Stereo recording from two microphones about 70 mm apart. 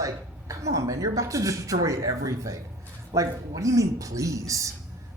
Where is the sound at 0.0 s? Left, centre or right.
Right.